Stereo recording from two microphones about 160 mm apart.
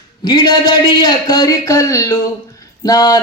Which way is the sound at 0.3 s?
25° left (ahead or behind).